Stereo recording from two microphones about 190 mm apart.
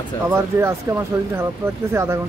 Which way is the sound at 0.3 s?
15° right (ahead or behind).